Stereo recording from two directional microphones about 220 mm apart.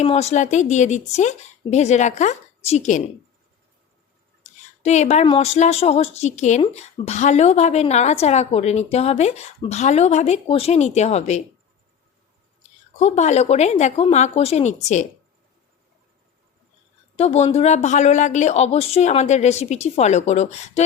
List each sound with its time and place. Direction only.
0.0 s speech: 30° left (ahead or behind)
4.8 s a woman's voice: 30° left (ahead or behind)
13.0 s speech: 30° left (ahead or behind)
17.2 s speech: 30° left (ahead or behind)